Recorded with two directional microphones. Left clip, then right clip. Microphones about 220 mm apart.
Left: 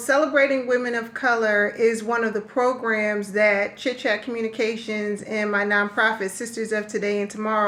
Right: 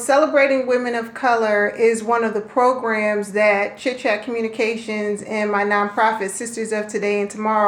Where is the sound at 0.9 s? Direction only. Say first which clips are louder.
Right 3 dB; 15° left (ahead or behind).